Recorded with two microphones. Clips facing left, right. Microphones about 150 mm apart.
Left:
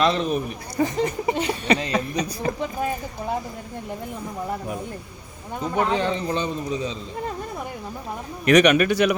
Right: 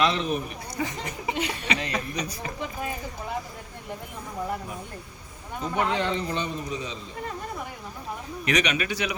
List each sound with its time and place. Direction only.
0.0 s speech: 40° left (ahead or behind)
5.7 s speech: 35° left (ahead or behind)
8.4 s a man's voice: 55° left (ahead or behind)